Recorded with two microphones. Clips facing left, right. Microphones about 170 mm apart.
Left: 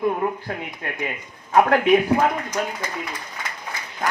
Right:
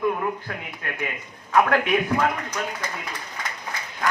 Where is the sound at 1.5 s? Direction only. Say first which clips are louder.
Left 4 dB; 30° left (ahead or behind).